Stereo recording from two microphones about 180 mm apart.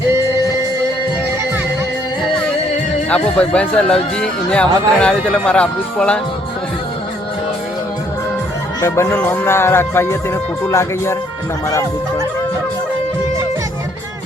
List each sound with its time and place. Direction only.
3.1 s music: 5° left (ahead or behind)
3.8 s speech: 5° left (ahead or behind)
8.8 s music: 15° left (ahead or behind)